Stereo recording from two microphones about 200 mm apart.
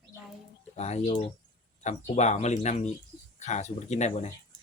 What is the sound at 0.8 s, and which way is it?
Speech, 35° left (ahead or behind).